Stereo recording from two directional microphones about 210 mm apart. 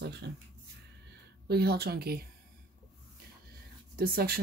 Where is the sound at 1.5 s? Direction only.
50° right (ahead or behind).